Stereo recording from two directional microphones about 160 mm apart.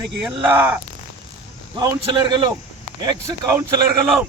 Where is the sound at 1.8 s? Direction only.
25° right (ahead or behind).